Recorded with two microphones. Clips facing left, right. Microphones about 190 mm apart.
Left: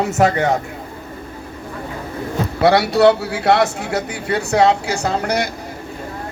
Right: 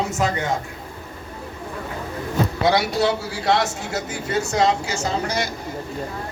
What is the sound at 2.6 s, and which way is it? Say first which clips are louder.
A man's voice: left 8 dB; 65° left (ahead or behind).